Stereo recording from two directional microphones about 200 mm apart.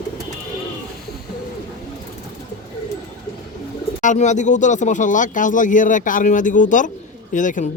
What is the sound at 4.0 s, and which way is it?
Speech, 35° left (ahead or behind).